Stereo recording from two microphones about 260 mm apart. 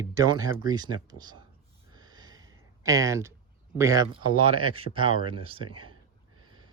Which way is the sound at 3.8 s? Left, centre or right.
Centre.